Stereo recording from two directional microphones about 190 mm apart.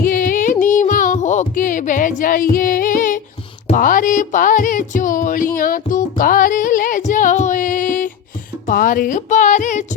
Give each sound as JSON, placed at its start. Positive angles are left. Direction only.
{"t": 0.0, "sound": "music", "side_deg": 45}
{"t": 3.7, "sound": "speech", "side_deg": 45}